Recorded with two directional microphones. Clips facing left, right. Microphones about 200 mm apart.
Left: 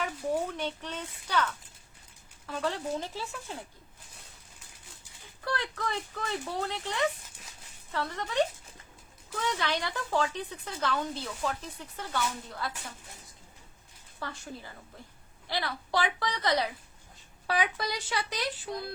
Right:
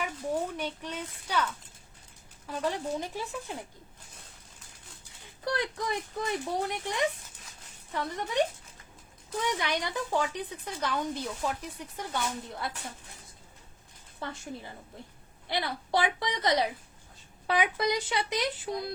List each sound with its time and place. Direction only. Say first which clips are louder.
0.4 s speech: even; 10° right (ahead or behind)
2.5 s speech: right 1 dB; 10° right (ahead or behind)
5.5 s a woman's voice: right 2 dB; 15° right (ahead or behind)
9.4 s speech: even; 15° right (ahead or behind)
14.2 s a woman's voice: right 2 dB; 20° right (ahead or behind)